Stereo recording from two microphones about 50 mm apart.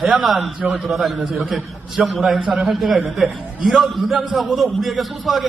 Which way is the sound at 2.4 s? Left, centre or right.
Centre.